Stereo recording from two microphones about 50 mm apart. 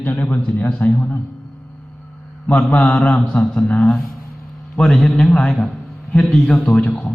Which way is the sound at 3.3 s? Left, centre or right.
Left.